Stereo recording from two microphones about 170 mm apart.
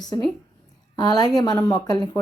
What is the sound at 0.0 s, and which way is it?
A woman's voice, 25° left (ahead or behind).